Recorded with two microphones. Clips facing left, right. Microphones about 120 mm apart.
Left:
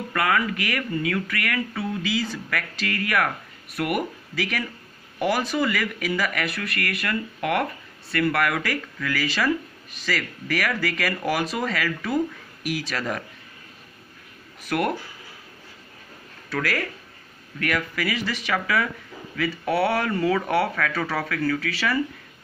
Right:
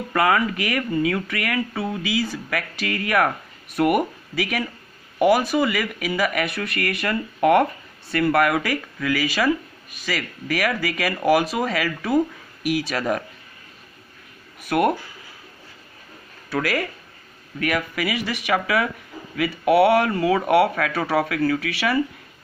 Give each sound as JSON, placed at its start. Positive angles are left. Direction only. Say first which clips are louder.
{"t": 0.1, "sound": "speech", "louder": "right 4 dB", "side_deg": -25}
{"t": 14.7, "sound": "speech", "louder": "right 5 dB", "side_deg": -20}
{"t": 16.4, "sound": "speech", "louder": "right 3 dB", "side_deg": -15}